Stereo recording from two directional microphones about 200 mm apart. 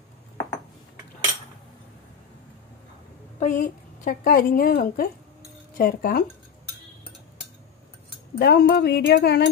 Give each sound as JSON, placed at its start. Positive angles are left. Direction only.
{"t": 3.3, "sound": "a woman's voice", "side_deg": 40}
{"t": 8.4, "sound": "a woman's voice", "side_deg": 50}